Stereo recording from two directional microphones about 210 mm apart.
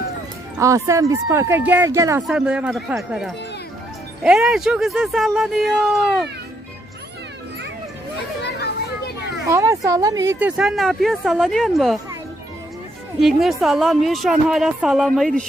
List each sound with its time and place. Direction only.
0.6 s speech: 15° right (ahead or behind)
9.5 s speech: 15° right (ahead or behind)
10.6 s speech: centre (ahead or behind)
13.2 s speech: centre (ahead or behind)